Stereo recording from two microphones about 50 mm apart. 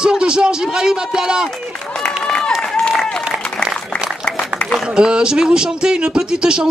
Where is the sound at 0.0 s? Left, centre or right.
Centre.